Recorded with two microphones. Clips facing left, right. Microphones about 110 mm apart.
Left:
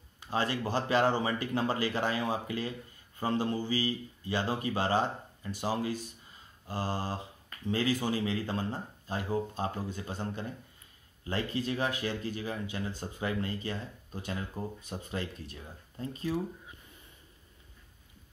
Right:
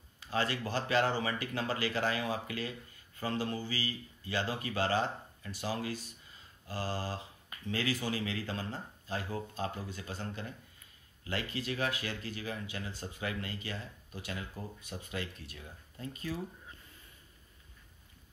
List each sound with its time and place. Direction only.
0.3 s speech: 25° left (ahead or behind)
6.7 s speech: 20° left (ahead or behind)
16.3 s speech: 15° left (ahead or behind)